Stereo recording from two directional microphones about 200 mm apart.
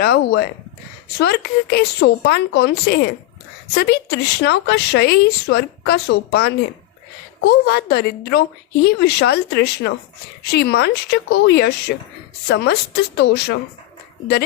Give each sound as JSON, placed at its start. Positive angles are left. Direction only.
{"t": 0.0, "sound": "speech", "side_deg": 50}
{"t": 13.1, "sound": "speech", "side_deg": 55}